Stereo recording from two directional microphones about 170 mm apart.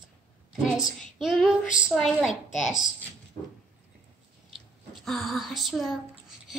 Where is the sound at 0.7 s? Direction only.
5° right (ahead or behind).